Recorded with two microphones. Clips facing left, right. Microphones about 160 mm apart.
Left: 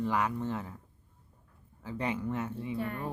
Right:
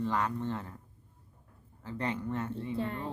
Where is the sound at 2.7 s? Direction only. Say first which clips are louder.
Right 1 dB; 25° right (ahead or behind).